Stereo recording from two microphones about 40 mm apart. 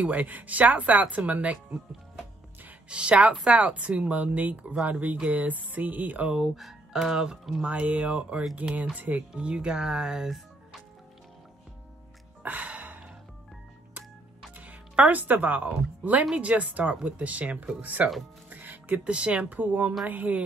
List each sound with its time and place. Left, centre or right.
0.0 s speech: right
2.9 s speech: right
6.4 s speech: centre
7.6 s speech: right
9.3 s speech: right
12.4 s music: right
14.6 s speech: right
18.5 s music: right
19.0 s speech: right
19.5 s speech: right